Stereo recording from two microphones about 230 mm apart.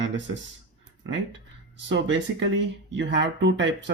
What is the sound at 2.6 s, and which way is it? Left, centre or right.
Speech, right.